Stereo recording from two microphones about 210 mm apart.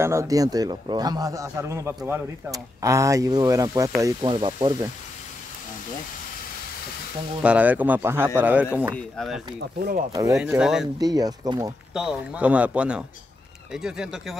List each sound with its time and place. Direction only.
0.0 s a man's voice: 15° right (ahead or behind)
7.4 s a man's voice: 5° right (ahead or behind)
8.9 s speech: 5° left (ahead or behind)
9.8 s speech: 45° right (ahead or behind)
10.3 s speech: 5° right (ahead or behind)
11.0 s a man's voice: 20° right (ahead or behind)
11.9 s speech: 5° right (ahead or behind)